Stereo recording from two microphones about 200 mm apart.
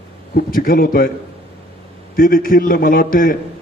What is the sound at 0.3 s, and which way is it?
Speech, 45° left (ahead or behind).